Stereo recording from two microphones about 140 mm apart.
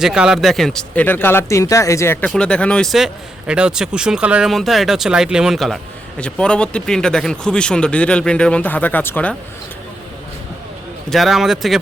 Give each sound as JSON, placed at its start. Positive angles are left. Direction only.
{"t": 0.0, "sound": "speech", "side_deg": -5}
{"t": 2.2, "sound": "speech", "side_deg": 5}
{"t": 11.1, "sound": "speech", "side_deg": 0}